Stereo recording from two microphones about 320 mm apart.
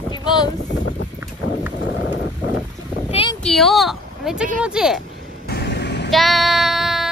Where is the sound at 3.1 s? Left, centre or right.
Centre.